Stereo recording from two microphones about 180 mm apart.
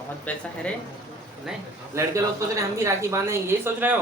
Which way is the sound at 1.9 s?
15° right (ahead or behind).